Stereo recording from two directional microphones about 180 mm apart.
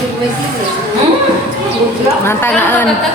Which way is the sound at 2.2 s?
10° left (ahead or behind).